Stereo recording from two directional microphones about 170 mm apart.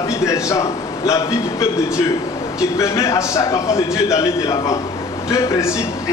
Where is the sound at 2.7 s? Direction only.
15° left (ahead or behind).